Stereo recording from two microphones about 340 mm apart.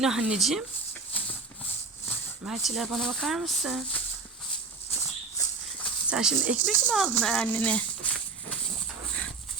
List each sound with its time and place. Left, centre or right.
0.0 s speech: centre
2.0 s speech: centre
5.4 s a sound: centre
6.7 s speech: centre